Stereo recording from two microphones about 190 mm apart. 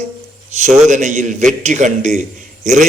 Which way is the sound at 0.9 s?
40° right (ahead or behind).